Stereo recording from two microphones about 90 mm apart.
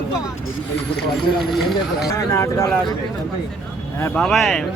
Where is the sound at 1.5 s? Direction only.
Centre (ahead or behind).